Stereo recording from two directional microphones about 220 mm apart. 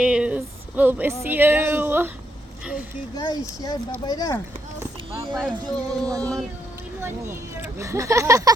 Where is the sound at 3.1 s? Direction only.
15° left (ahead or behind).